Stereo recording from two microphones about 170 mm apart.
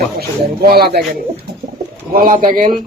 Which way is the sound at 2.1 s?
55° right (ahead or behind).